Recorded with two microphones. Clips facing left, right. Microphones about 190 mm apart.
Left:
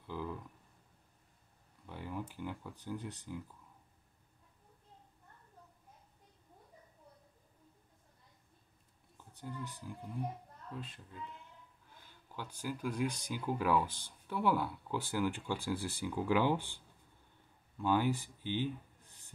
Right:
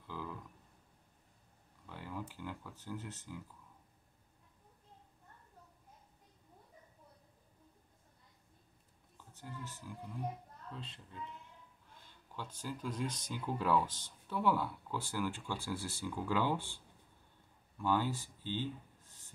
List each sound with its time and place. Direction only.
0.0 s a sound: 15° left (ahead or behind)
1.9 s speech: 15° left (ahead or behind)
9.3 s speech: 15° left (ahead or behind)
12.4 s speech: 10° left (ahead or behind)